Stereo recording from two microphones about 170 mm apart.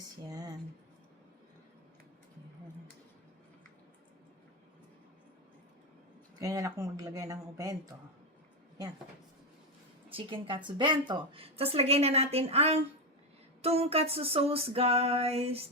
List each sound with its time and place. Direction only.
0.3 s a sound: 20° right (ahead or behind)
6.4 s speech: 20° right (ahead or behind)
10.1 s a woman's voice: 30° right (ahead or behind)